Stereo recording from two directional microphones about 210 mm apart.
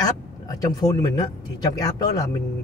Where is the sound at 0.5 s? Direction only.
20° left (ahead or behind).